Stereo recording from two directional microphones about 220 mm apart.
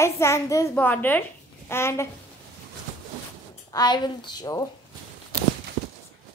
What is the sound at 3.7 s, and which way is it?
Speech, 20° left (ahead or behind).